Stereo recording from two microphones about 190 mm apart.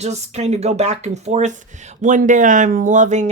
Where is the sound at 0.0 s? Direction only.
35° right (ahead or behind).